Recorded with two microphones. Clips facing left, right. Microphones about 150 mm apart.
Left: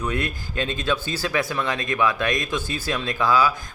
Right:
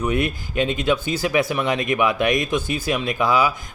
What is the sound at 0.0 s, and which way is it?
Speech, 20° right (ahead or behind).